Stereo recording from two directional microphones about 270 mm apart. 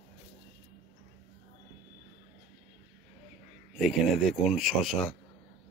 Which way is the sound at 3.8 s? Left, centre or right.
Centre.